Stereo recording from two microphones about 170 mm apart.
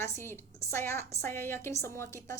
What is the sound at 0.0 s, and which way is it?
A woman's voice, 15° left (ahead or behind).